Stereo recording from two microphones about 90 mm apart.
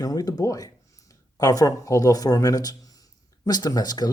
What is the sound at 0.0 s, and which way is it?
Speech, 45° left (ahead or behind).